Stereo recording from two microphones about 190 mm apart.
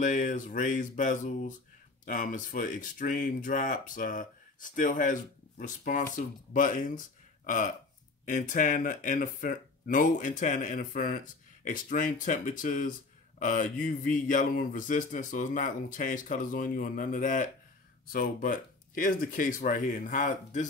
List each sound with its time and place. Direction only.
0.0 s speech: 40° left (ahead or behind)